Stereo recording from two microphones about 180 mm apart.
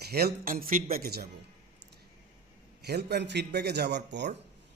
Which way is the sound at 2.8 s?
65° right (ahead or behind).